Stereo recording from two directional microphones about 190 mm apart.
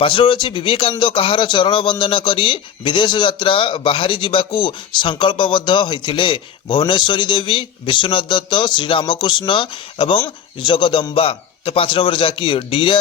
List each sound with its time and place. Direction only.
0.0 s speech: 25° left (ahead or behind)